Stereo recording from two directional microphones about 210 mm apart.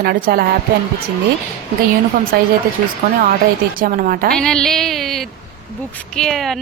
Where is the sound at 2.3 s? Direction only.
45° right (ahead or behind).